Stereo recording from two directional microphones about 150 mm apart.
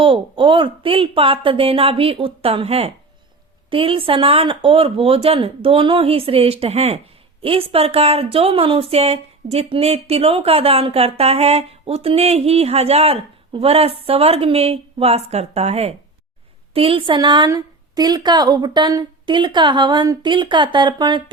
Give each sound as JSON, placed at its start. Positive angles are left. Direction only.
{"t": 0.0, "sound": "a woman's voice", "side_deg": -35}